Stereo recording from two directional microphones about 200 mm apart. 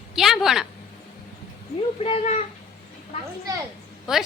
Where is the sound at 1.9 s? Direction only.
30° left (ahead or behind).